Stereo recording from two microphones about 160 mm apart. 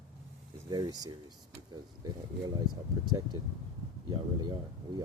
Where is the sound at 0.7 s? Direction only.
25° right (ahead or behind).